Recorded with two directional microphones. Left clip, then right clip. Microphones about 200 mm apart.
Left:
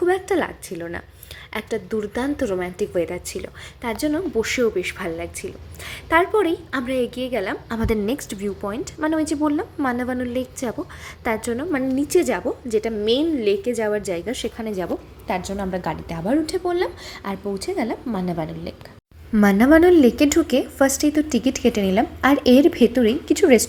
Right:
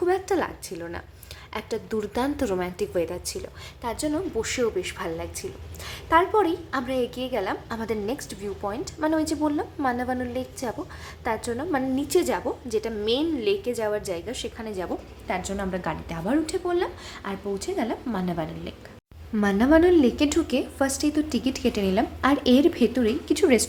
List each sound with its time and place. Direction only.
0.0 s a woman's voice: 10° left (ahead or behind)
19.3 s a woman's voice: 20° left (ahead or behind)